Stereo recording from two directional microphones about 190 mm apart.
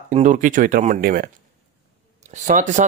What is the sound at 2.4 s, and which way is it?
Speech, 40° right (ahead or behind).